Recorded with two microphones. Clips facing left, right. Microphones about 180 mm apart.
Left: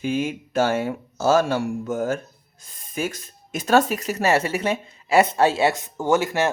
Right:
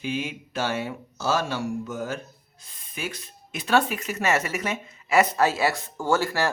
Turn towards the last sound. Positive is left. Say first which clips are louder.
# left 3 dB
turn(degrees=20)  # may be behind; listen again after turning